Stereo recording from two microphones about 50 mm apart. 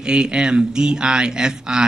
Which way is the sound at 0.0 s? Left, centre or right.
Centre.